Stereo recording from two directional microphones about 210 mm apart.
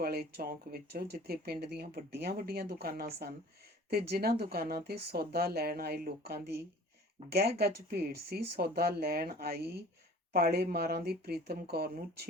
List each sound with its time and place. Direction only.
0.0 s speech: 50° right (ahead or behind)